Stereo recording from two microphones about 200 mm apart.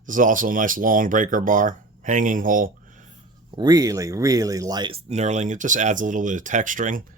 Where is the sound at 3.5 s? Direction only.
20° right (ahead or behind); by 7.0 s 40° right (ahead or behind).